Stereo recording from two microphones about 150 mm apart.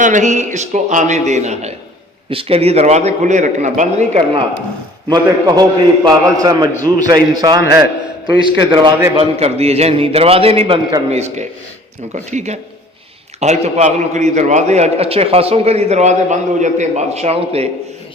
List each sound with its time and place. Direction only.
0.0 s a man's voice: 55° right (ahead or behind)
5.0 s a man's voice: 25° right (ahead or behind)
9.1 s a man's voice: 45° right (ahead or behind)